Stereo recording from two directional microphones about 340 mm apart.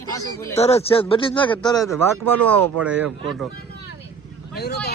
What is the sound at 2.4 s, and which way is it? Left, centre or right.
Speech, right.